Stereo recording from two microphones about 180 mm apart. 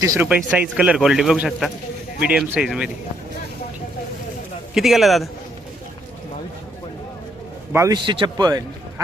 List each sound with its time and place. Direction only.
0.0 s speech: 20° right (ahead or behind)
0.3 s speech: 10° right (ahead or behind)
4.7 s speech: centre (ahead or behind)
7.7 s a man's voice: 15° right (ahead or behind)